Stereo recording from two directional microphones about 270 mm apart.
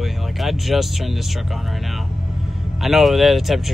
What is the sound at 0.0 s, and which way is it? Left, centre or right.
Speech, centre.